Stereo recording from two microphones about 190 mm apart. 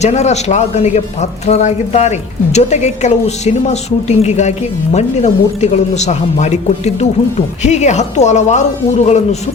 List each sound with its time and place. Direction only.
0.0 s speech: 35° left (ahead or behind)